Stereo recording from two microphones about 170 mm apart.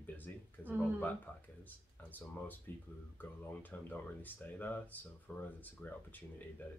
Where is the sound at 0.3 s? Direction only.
10° left (ahead or behind).